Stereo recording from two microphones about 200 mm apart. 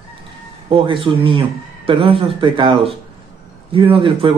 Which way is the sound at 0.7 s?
25° right (ahead or behind).